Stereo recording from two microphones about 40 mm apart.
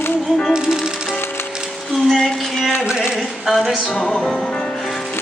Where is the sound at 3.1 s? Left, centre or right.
Centre.